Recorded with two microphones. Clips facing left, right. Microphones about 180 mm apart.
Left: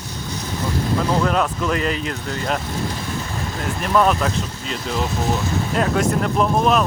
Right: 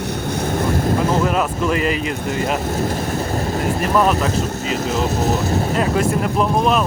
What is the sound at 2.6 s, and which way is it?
Vehicle, 45° right (ahead or behind).